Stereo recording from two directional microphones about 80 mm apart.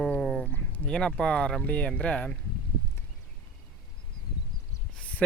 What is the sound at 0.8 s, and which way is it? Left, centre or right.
Speech, centre.